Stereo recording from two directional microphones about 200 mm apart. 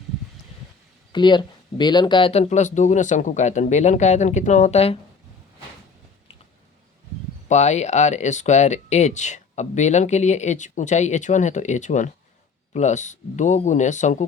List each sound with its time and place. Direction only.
1.1 s speech: 20° left (ahead or behind)
7.4 s speech: 35° left (ahead or behind)